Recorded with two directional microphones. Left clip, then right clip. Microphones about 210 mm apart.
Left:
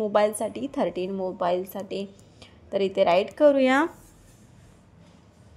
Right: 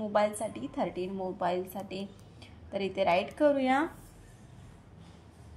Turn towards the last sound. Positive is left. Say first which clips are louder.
# left 7 dB
turn(degrees=55)  # may be behind; listen again after turning